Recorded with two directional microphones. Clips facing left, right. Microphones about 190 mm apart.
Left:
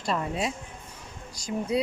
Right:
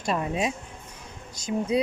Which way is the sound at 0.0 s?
15° right (ahead or behind).